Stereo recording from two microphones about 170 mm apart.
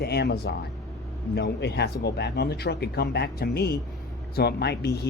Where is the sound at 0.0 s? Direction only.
70° left (ahead or behind).